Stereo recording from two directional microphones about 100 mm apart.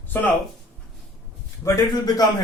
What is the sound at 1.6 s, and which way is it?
Speech, 40° left (ahead or behind).